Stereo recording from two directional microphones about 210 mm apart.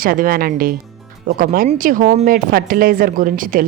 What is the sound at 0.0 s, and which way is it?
Speech, 45° right (ahead or behind).